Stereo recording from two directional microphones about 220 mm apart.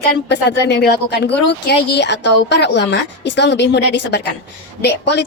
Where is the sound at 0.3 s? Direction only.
50° left (ahead or behind).